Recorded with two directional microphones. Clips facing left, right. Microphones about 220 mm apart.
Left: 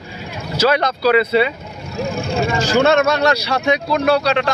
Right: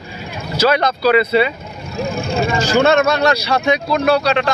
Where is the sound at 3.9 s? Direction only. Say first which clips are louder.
Right 1 dB; 45° right (ahead or behind).